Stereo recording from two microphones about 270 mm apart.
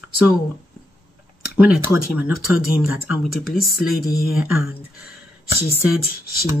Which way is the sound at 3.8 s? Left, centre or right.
Left.